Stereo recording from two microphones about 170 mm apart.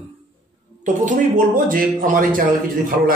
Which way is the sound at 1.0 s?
50° right (ahead or behind).